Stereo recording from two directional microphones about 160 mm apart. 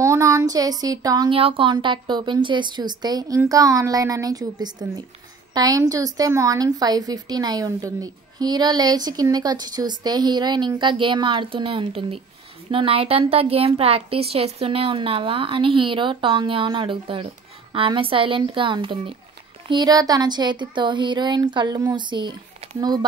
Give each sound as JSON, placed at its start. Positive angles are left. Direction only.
{"t": 0.0, "sound": "a woman's voice", "side_deg": -20}